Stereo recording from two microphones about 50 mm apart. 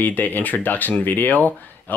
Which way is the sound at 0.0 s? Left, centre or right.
Left.